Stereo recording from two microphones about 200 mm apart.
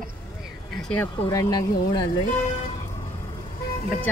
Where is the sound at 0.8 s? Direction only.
5° left (ahead or behind).